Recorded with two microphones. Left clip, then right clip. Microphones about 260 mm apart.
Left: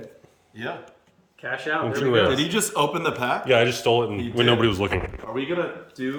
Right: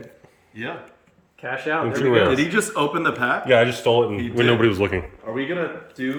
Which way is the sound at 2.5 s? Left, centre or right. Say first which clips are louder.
Right 2 dB; left.